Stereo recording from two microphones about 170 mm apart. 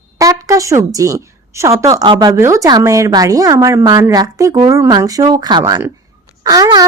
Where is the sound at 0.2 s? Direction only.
20° right (ahead or behind).